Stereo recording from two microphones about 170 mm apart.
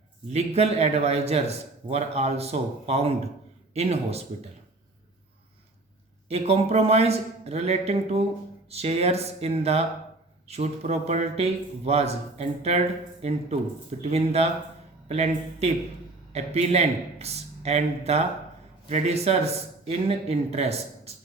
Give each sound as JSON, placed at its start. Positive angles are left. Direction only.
{"t": 0.3, "sound": "a man's voice", "side_deg": -40}
{"t": 6.2, "sound": "a man's voice", "side_deg": -40}
{"t": 14.0, "sound": "a man's voice", "side_deg": -40}